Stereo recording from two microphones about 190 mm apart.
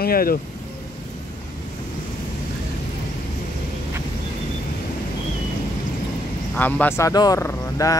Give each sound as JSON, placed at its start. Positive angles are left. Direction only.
{"t": 0.0, "sound": "speech", "side_deg": 50}
{"t": 6.5, "sound": "speech", "side_deg": 10}